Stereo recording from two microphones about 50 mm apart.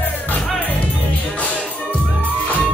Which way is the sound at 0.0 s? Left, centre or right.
Left.